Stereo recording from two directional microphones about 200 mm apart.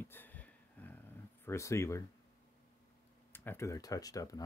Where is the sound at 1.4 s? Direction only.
15° left (ahead or behind).